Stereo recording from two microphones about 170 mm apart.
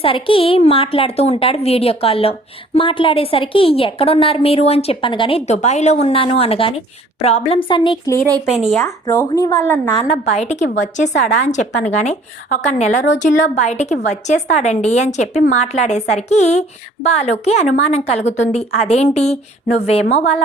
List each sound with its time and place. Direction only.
0.0 s a woman's voice: 35° left (ahead or behind)
5.5 s a woman's voice: 40° left (ahead or behind)
8.7 s speech: 15° left (ahead or behind)
10.1 s a woman's voice: 40° left (ahead or behind)